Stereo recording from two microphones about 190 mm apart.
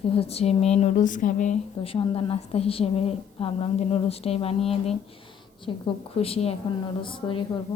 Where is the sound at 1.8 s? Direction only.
30° left (ahead or behind).